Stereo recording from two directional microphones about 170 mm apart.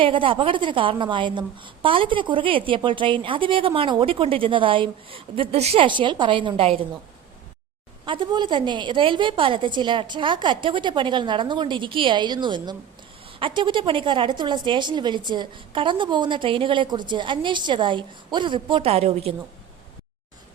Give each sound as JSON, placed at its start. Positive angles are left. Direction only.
{"t": 0.0, "sound": "a woman's voice", "side_deg": -30}
{"t": 8.0, "sound": "a woman's voice", "side_deg": -30}